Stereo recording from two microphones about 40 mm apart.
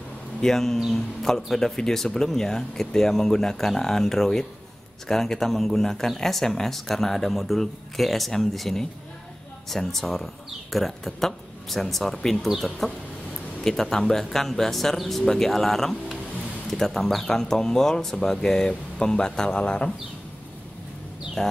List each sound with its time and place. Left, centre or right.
0.4 s speech: centre
21.4 s speech: centre